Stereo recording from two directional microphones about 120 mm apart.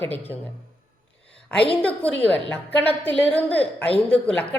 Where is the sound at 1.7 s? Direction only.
10° left (ahead or behind).